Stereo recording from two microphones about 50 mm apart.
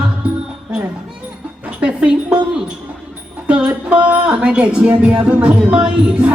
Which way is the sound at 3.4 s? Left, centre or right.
Right.